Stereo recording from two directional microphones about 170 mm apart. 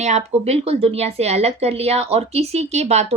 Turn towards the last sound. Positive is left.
turn(degrees=-40)  # may be behind; listen again after turning